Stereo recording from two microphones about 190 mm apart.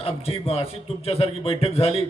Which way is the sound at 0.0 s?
30° left (ahead or behind).